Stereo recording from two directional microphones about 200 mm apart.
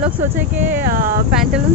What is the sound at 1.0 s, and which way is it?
Speech, 45° right (ahead or behind).